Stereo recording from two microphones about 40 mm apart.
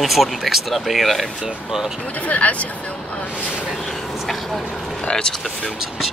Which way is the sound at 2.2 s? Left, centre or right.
Left.